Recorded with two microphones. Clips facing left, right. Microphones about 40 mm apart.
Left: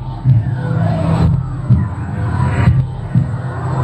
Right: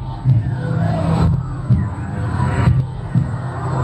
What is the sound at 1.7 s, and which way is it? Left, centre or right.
Music, centre.